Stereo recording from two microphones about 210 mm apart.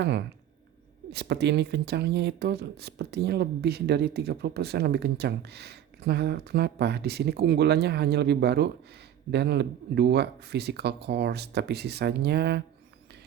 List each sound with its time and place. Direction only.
0.0 s speech: 55° right (ahead or behind)